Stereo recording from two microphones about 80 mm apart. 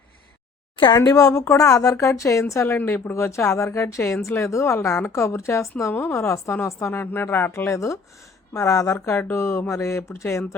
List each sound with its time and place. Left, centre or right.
0.9 s speech: left
7.0 s speech: left
9.0 s speech: left